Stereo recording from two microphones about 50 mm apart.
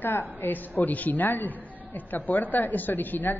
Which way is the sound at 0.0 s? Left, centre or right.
Left.